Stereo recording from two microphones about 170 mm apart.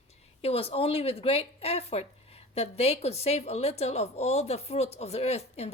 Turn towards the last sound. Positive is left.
turn(degrees=35)  # may be behind; listen again after turning